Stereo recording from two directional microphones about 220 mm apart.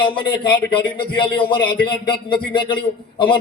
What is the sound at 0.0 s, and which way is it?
A man's voice, 20° left (ahead or behind).